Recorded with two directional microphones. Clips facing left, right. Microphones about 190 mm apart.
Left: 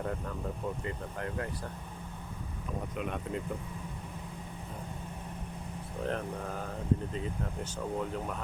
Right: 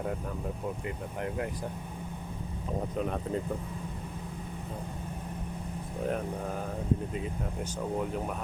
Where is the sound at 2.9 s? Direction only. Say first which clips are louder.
Right 4 dB; 35° right (ahead or behind).